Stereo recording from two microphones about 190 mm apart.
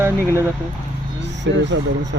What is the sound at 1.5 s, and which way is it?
Speech, 65° right (ahead or behind).